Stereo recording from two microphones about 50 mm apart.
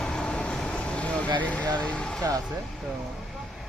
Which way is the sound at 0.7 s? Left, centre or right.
Left.